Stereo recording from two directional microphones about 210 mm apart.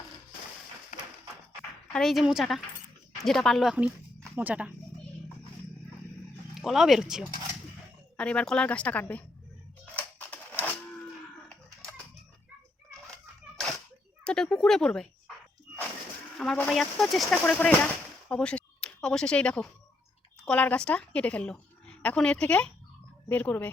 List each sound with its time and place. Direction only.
0.9 s tap: 35° left (ahead or behind)
1.9 s speech: centre (ahead or behind)
6.5 s a woman's voice: centre (ahead or behind)
9.9 s cash register: 5° left (ahead or behind)
13.6 s a sound: centre (ahead or behind)
14.3 s speech: 5° left (ahead or behind)
16.4 s a woman's voice: 5° left (ahead or behind)